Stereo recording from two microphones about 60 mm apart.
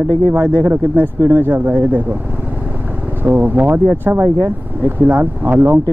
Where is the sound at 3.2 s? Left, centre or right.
Right.